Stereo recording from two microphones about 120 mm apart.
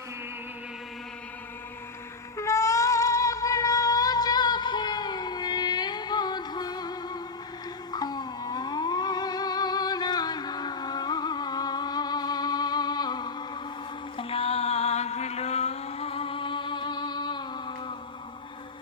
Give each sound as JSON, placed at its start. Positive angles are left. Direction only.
{"t": 2.4, "sound": "singing", "side_deg": 25}
{"t": 7.9, "sound": "music", "side_deg": 35}
{"t": 14.2, "sound": "music", "side_deg": 55}